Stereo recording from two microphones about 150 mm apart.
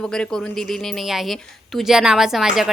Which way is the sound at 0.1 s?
5° left (ahead or behind).